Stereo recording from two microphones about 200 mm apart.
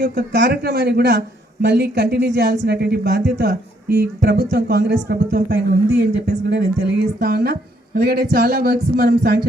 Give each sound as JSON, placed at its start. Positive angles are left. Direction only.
{"t": 0.0, "sound": "a woman's voice", "side_deg": -55}